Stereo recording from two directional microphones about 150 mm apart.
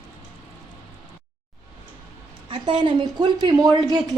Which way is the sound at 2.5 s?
35° right (ahead or behind).